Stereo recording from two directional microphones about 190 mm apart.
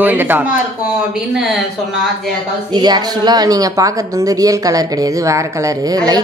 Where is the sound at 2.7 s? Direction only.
20° right (ahead or behind).